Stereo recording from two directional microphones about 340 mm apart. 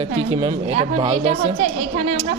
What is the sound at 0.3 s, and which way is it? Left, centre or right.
A woman's voice, centre.